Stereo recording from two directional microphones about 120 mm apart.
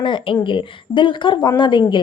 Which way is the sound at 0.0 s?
45° left (ahead or behind).